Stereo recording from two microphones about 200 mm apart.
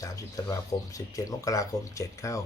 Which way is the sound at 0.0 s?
15° left (ahead or behind).